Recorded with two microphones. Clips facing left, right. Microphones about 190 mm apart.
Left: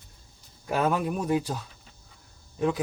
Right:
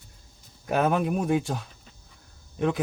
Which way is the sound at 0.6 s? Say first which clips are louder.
Right 2 dB; 60° right (ahead or behind).